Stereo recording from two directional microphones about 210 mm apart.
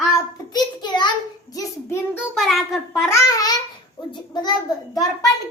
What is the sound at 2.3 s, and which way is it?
Speech, centre (ahead or behind).